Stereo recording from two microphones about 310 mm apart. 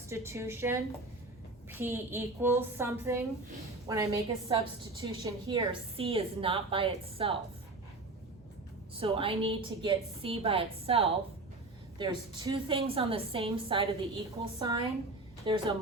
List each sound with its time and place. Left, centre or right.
0.1 s a woman's voice: centre
1.8 s a woman's voice: centre
9.0 s a woman's voice: centre